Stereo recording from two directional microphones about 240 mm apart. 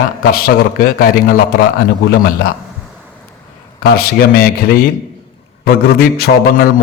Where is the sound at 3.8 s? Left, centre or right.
Left.